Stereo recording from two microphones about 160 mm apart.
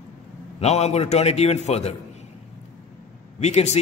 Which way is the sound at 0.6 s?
40° left (ahead or behind).